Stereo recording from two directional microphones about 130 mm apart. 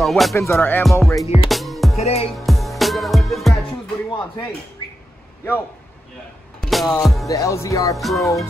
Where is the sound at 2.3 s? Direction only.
Centre (ahead or behind).